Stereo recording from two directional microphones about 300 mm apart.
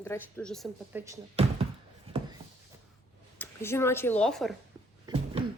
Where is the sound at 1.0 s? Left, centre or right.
Centre.